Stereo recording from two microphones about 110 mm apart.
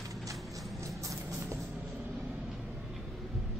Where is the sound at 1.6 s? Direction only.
10° right (ahead or behind).